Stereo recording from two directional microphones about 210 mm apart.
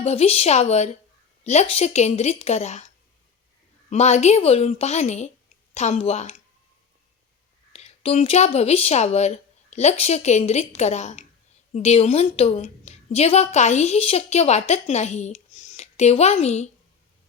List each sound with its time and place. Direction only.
0.0 s a woman's voice: 30° left (ahead or behind)
3.8 s a woman's voice: 30° left (ahead or behind)
7.7 s a woman's voice: 30° left (ahead or behind)